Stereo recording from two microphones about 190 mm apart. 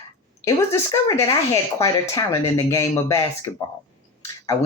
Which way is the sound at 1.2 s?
15° left (ahead or behind).